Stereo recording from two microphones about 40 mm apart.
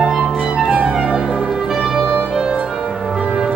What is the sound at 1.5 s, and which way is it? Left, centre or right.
Music, centre.